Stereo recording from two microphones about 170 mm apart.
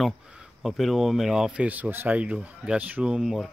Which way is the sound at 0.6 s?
Centre (ahead or behind).